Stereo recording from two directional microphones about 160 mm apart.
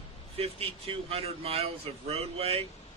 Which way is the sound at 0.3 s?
35° right (ahead or behind).